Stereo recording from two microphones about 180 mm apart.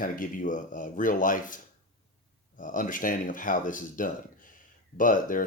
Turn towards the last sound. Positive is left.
turn(degrees=50)  # may be behind; listen again after turning